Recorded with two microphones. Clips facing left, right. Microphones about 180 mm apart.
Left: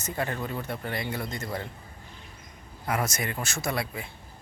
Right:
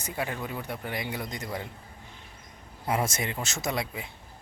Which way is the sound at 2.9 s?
25° right (ahead or behind).